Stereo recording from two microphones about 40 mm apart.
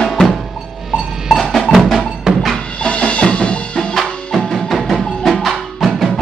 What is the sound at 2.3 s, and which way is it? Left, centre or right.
Music, centre.